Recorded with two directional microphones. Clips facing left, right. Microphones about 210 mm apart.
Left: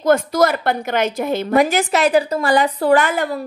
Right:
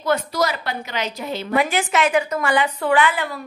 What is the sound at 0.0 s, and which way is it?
A woman's voice, 45° left (ahead or behind).